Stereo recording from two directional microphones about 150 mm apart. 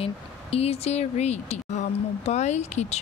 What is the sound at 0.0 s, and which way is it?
Speech, 40° left (ahead or behind).